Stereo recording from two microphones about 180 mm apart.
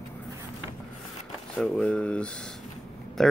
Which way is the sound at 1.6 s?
5° left (ahead or behind).